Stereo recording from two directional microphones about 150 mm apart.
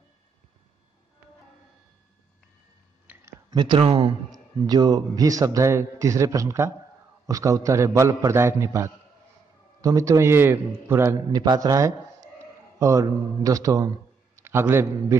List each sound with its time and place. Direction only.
3.1 s clicking: 10° right (ahead or behind)
3.4 s speech: 30° right (ahead or behind)
4.3 s a man's voice: 25° right (ahead or behind)